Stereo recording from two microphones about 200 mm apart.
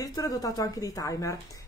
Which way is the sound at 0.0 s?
20° left (ahead or behind).